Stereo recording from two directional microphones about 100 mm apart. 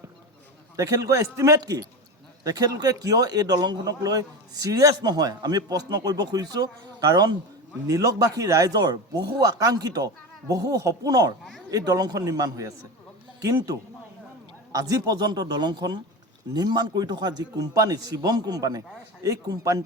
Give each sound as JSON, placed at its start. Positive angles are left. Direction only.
{"t": 0.8, "sound": "speech", "side_deg": -35}